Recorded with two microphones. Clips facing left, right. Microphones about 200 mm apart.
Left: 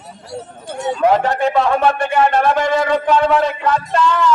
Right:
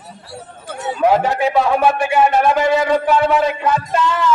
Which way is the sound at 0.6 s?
5° right (ahead or behind).